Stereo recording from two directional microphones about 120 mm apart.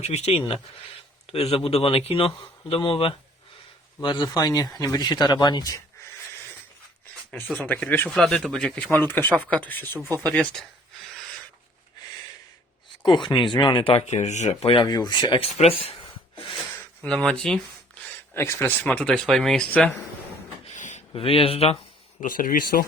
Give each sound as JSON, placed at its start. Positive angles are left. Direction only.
{"t": 0.0, "sound": "speech", "side_deg": 65}
{"t": 1.3, "sound": "speech", "side_deg": 55}
{"t": 7.5, "sound": "speech", "side_deg": 10}
{"t": 8.1, "sound": "speech", "side_deg": 5}
{"t": 13.0, "sound": "speech", "side_deg": 40}
{"t": 14.6, "sound": "speech", "side_deg": 45}
{"t": 15.5, "sound": "speech", "side_deg": 55}
{"t": 16.7, "sound": "speech", "side_deg": 10}
{"t": 18.3, "sound": "speech", "side_deg": 25}
{"t": 18.6, "sound": "speech", "side_deg": 15}
{"t": 20.7, "sound": "a sound", "side_deg": 85}
{"t": 21.1, "sound": "speech", "side_deg": 50}
{"t": 22.2, "sound": "speech", "side_deg": 90}